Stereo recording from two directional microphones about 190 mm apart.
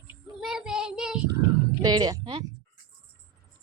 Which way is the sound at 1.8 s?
20° right (ahead or behind).